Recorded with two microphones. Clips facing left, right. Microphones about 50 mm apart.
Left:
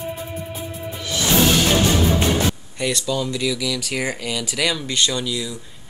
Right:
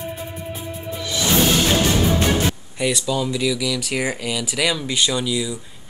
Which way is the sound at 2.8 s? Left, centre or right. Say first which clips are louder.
Right 2 dB; centre.